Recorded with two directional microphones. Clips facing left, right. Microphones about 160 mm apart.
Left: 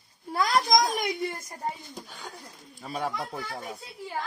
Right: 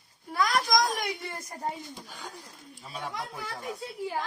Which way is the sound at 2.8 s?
55° left (ahead or behind).